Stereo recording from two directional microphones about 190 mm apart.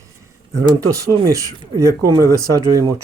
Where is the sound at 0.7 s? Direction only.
15° right (ahead or behind).